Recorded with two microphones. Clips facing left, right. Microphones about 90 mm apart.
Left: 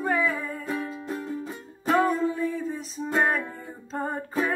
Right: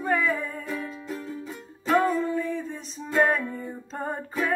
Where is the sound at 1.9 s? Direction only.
5° left (ahead or behind).